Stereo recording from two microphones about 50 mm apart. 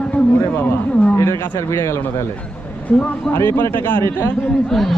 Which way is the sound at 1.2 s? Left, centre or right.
Left.